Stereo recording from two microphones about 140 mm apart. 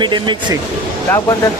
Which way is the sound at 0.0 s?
35° right (ahead or behind).